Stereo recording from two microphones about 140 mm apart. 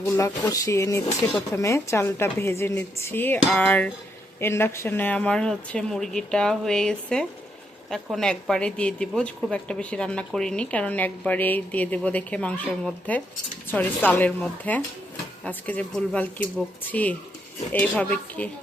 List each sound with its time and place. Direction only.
0.0 s speech: 20° left (ahead or behind)